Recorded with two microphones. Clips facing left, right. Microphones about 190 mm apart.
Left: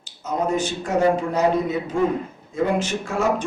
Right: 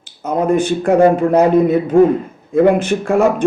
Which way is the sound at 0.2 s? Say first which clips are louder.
Right 8 dB; 55° right (ahead or behind).